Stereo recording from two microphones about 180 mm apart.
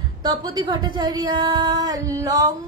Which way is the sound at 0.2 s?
25° right (ahead or behind).